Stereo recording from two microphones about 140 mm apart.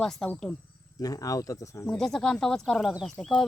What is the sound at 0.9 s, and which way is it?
Speech, 25° left (ahead or behind).